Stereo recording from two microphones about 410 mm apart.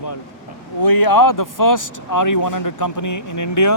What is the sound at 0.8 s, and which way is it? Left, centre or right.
Speech, left.